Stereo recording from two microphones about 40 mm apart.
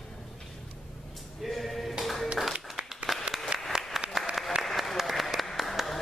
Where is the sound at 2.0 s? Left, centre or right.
Centre.